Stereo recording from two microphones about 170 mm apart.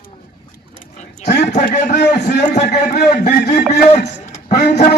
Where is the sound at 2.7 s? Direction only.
65° left (ahead or behind).